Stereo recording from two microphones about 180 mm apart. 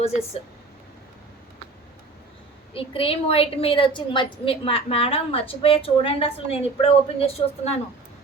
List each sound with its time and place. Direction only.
0.0 s speech: 35° left (ahead or behind)
2.7 s a woman's voice: 30° left (ahead or behind)